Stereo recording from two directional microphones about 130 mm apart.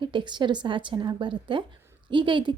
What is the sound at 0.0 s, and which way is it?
A woman's voice, 40° right (ahead or behind).